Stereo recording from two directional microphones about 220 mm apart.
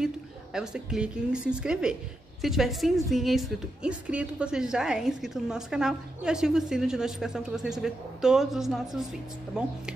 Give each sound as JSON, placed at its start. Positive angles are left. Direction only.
{"t": 0.0, "sound": "a woman's voice", "side_deg": 0}